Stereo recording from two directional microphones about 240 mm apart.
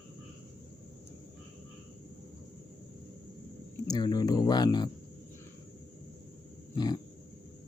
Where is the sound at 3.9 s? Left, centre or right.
Centre.